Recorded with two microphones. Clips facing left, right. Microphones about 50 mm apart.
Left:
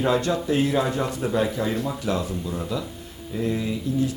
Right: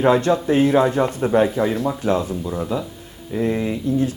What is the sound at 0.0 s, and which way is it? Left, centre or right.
Speech, right.